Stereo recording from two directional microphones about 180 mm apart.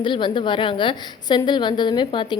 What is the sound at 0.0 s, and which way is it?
A woman's voice, 25° left (ahead or behind).